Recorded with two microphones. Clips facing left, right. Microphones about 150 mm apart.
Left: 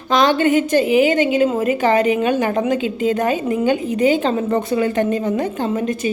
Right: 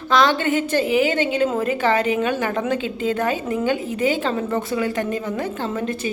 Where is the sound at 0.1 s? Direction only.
15° left (ahead or behind).